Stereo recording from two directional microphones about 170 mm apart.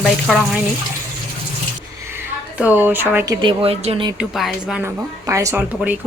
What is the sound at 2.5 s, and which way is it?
Speech, 10° right (ahead or behind).